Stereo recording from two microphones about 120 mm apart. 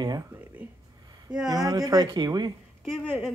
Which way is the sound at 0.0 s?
35° right (ahead or behind).